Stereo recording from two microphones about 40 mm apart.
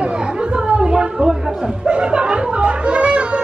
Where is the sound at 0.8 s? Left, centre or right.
Right.